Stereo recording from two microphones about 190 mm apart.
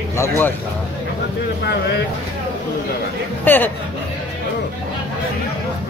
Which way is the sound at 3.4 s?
10° left (ahead or behind).